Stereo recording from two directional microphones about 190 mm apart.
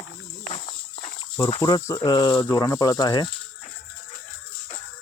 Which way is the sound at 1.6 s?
15° left (ahead or behind).